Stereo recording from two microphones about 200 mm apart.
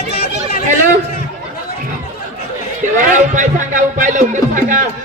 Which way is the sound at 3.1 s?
40° right (ahead or behind).